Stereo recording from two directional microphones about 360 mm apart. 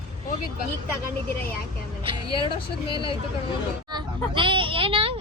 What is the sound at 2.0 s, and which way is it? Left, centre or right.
Vehicle, centre.